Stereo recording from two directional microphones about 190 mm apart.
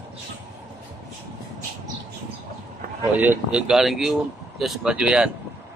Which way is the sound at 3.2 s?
5° right (ahead or behind).